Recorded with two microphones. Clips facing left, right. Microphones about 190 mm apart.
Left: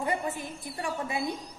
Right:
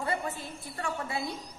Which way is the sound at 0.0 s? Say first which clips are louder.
Left 2 dB; 15° left (ahead or behind).